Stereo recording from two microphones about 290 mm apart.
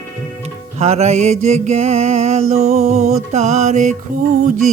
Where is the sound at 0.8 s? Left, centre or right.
Right.